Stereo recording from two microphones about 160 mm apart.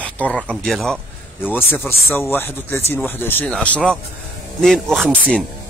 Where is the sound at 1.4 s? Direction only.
10° left (ahead or behind).